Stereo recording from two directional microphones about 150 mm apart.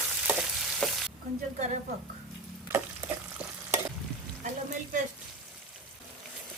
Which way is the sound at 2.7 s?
15° right (ahead or behind).